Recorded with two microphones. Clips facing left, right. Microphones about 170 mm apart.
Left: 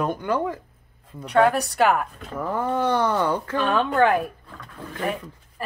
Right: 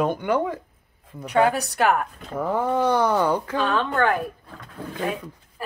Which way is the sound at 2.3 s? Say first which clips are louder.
Right 2 dB; 10° right (ahead or behind).